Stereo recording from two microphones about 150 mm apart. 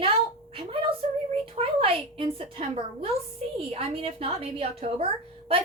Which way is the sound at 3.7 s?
40° right (ahead or behind).